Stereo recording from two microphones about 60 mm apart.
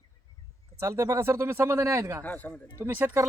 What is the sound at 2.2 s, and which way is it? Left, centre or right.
Speech, left.